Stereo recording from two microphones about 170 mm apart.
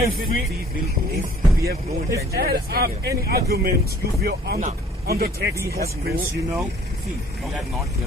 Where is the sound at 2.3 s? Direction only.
65° right (ahead or behind).